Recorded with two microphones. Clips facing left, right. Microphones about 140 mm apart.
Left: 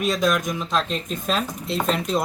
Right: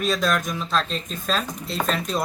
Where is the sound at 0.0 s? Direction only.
15° left (ahead or behind).